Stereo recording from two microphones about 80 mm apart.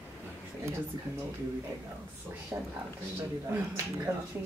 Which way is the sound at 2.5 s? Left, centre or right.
Right.